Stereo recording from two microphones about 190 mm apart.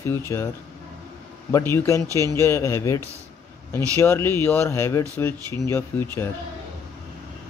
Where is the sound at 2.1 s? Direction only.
20° right (ahead or behind).